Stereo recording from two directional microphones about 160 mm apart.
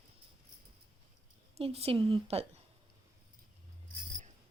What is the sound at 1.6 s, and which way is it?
Speech, 40° right (ahead or behind).